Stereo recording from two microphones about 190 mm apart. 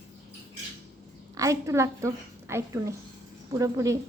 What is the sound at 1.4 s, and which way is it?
Speech, 15° right (ahead or behind).